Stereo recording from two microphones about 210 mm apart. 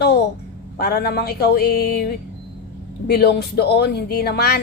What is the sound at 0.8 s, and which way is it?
A woman's voice, 45° left (ahead or behind).